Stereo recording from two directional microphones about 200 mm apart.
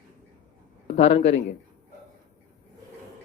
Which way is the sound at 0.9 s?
30° left (ahead or behind).